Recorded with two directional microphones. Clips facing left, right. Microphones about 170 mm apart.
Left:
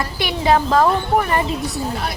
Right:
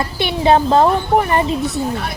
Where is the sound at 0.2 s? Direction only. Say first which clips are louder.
Right 3 dB; 25° right (ahead or behind).